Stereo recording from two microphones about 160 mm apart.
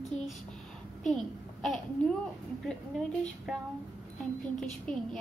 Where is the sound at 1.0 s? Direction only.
5° left (ahead or behind).